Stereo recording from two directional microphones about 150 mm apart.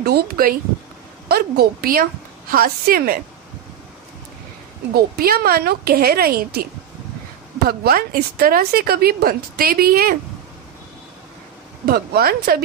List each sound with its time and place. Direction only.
0.0 s a woman's voice: 85° right
4.9 s a woman's voice: 90° right
11.8 s a woman's voice: 90° right